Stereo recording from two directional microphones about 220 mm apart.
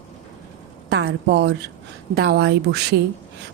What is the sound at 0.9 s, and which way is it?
A woman's voice, 50° right (ahead or behind).